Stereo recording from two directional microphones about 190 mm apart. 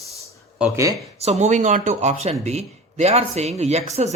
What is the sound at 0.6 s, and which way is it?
Speech, 15° right (ahead or behind).